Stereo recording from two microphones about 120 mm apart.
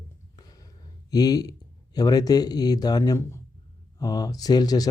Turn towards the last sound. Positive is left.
turn(degrees=35)  # may be behind; listen again after turning